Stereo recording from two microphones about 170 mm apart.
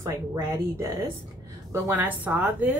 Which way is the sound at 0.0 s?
20° right (ahead or behind).